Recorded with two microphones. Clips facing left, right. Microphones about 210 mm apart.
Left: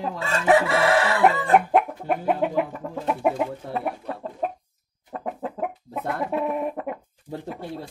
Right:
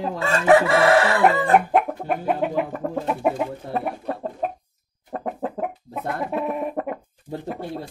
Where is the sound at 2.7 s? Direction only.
60° right (ahead or behind).